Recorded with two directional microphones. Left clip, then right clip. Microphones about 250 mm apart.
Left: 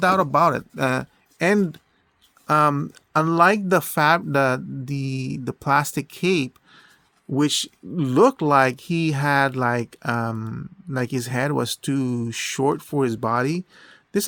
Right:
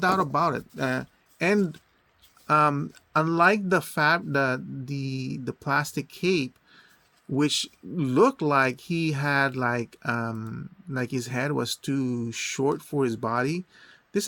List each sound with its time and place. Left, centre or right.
0.0 s speech: left